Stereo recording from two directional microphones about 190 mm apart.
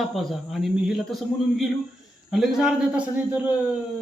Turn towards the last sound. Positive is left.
turn(degrees=-5)  # may be behind; listen again after turning